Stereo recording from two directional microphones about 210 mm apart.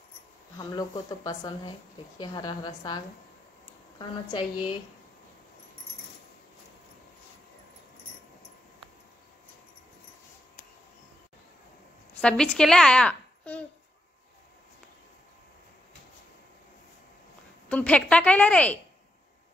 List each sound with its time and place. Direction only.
0.6 s a woman's voice: 20° left (ahead or behind)
4.3 s a woman's voice: 25° left (ahead or behind)
12.2 s a woman's voice: 5° left (ahead or behind)
17.6 s a woman's voice: 5° left (ahead or behind)